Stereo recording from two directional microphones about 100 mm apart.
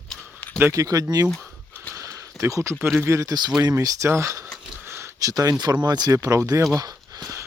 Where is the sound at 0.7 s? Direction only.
35° right (ahead or behind).